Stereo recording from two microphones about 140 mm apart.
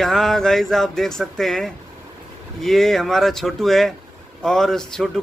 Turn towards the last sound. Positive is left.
turn(degrees=5)  # may be behind; listen again after turning